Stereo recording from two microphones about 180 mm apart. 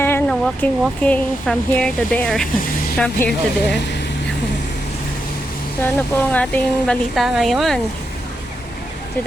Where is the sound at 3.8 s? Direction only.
70° left (ahead or behind).